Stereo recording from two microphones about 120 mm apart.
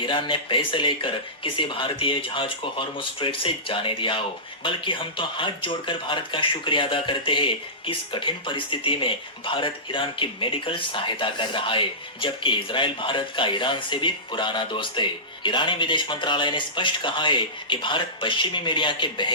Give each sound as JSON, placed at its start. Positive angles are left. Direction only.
{"t": 0.0, "sound": "speech", "side_deg": 45}